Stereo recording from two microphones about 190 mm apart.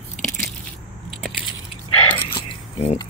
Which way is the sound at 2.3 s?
30° left (ahead or behind).